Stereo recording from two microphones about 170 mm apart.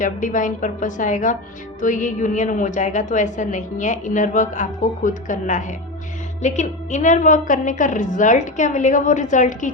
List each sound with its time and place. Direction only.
0.0 s a woman's voice: 50° left (ahead or behind)